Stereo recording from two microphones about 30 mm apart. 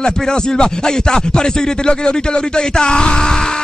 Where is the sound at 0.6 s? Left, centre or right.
Left.